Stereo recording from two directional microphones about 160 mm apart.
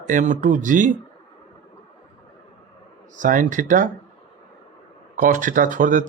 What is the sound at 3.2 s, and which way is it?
Speech, 55° right (ahead or behind).